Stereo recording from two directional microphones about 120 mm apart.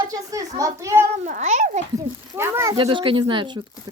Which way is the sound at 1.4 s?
90° right.